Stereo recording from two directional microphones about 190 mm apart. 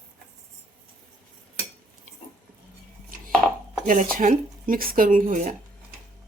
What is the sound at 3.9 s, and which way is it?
Speech, 45° right (ahead or behind).